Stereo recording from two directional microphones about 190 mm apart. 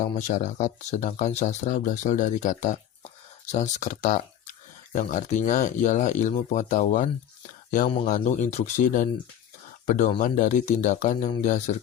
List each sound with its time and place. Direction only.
0.0 s speech: 40° left (ahead or behind)